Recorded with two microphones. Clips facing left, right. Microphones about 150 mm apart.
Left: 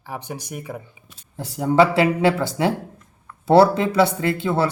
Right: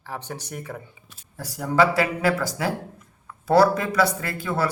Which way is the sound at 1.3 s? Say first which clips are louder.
Left 4 dB; 25° left (ahead or behind).